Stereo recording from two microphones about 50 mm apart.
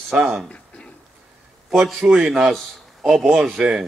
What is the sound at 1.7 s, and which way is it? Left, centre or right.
A man's voice, centre.